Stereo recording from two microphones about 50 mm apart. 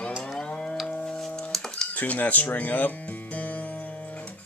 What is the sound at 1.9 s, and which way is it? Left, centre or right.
Speech, left.